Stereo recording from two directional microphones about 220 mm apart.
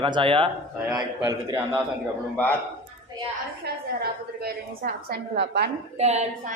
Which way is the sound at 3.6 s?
45° right (ahead or behind).